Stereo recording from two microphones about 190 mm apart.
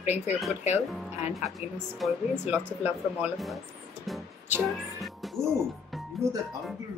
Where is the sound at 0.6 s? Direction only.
35° left (ahead or behind).